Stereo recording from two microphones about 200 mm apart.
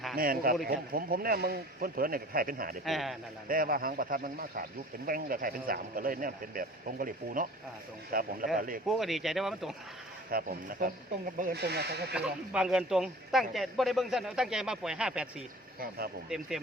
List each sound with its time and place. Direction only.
0.2 s a man's voice: 45° right (ahead or behind)
2.8 s a man's voice: centre (ahead or behind)
3.5 s a man's voice: 45° right (ahead or behind)
8.9 s a man's voice: centre (ahead or behind)
10.2 s a man's voice: 45° right (ahead or behind)
12.1 s a man's voice: 5° right (ahead or behind)